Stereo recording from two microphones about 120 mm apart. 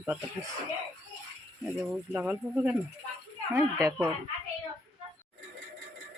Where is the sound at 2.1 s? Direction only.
10° right (ahead or behind).